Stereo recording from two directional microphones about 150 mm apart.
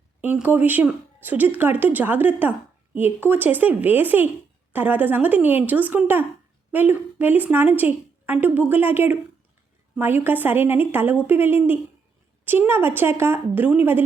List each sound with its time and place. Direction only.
0.2 s speech: 10° right (ahead or behind)